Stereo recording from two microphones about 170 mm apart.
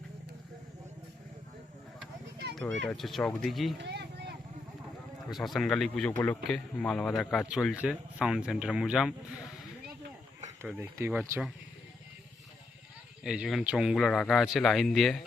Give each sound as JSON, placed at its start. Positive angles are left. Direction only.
{"t": 2.9, "sound": "speech", "side_deg": 0}
{"t": 3.8, "sound": "a sound", "side_deg": -80}
{"t": 5.3, "sound": "speech", "side_deg": 0}
{"t": 10.6, "sound": "speech", "side_deg": -15}
{"t": 11.2, "sound": "speech", "side_deg": 0}
{"t": 13.2, "sound": "speech", "side_deg": -5}